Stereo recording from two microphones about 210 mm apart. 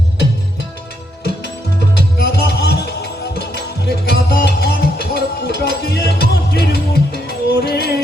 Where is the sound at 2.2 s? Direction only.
50° left (ahead or behind).